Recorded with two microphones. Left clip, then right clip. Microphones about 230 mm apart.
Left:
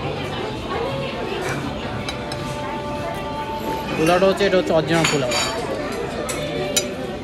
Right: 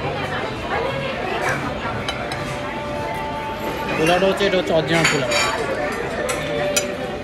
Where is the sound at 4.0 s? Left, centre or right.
Centre.